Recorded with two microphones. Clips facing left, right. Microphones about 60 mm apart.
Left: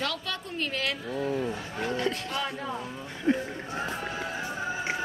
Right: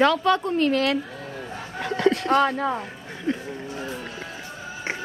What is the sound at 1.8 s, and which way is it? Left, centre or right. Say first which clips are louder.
Speech: right 9 dB; right.